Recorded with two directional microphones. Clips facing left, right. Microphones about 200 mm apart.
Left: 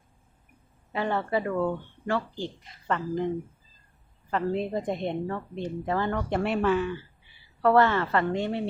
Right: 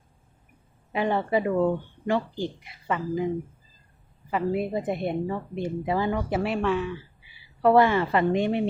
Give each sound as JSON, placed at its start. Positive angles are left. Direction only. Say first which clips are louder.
{"t": 0.9, "sound": "a woman's voice", "louder": "right 3 dB", "side_deg": -15}
{"t": 7.6, "sound": "a woman's voice", "louder": "right 2 dB", "side_deg": -15}